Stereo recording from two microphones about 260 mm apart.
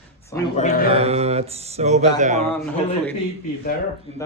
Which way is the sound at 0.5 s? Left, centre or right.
Left.